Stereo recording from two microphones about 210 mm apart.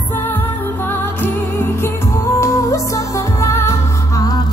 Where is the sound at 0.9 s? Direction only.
10° left (ahead or behind).